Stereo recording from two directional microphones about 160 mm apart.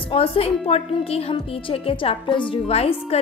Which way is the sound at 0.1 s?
35° left (ahead or behind).